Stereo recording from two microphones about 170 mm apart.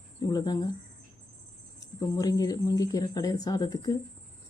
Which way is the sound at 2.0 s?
20° left (ahead or behind).